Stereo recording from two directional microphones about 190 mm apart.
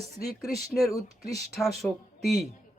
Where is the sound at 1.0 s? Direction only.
35° right (ahead or behind).